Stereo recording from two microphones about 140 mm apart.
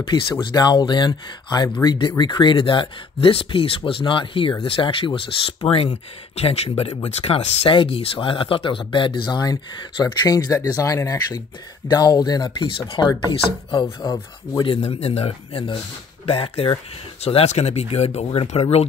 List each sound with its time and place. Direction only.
0.1 s speech: 35° left (ahead or behind)